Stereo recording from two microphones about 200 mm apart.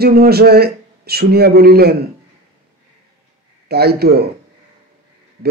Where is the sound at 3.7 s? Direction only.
50° right (ahead or behind).